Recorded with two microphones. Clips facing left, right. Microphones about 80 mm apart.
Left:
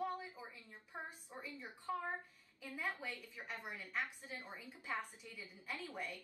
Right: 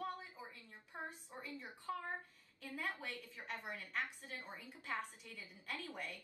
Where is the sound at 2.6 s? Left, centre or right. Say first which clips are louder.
Left 1 dB; centre.